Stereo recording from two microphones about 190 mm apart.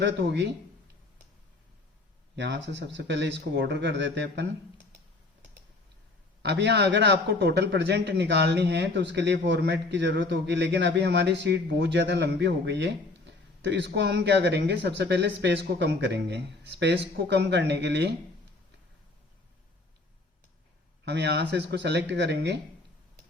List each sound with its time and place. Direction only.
0.0 s a man's voice: 65° right (ahead or behind)
2.3 s a man's voice: 65° right (ahead or behind)
6.4 s a man's voice: 65° right (ahead or behind)
21.0 s a man's voice: 65° right (ahead or behind)